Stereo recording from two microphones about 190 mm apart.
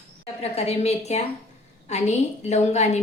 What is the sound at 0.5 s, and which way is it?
A woman's voice, 35° left (ahead or behind).